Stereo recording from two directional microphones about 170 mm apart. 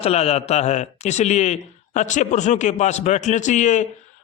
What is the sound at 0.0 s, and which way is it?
A man's voice, 35° left (ahead or behind).